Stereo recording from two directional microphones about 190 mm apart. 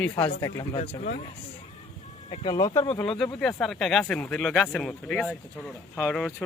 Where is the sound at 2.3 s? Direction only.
25° left (ahead or behind).